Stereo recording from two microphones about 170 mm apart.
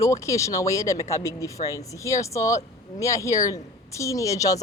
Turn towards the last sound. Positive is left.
turn(degrees=20)  # may be behind; listen again after turning